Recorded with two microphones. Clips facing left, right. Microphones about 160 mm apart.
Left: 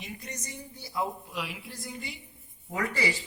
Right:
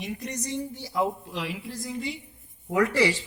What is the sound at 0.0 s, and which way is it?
Speech, 80° right.